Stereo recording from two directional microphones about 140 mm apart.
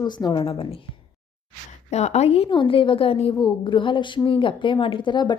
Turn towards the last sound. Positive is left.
turn(degrees=30)  # may be behind; listen again after turning